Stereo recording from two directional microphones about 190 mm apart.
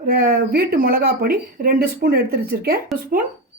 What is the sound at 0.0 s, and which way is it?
Speech, 50° right (ahead or behind).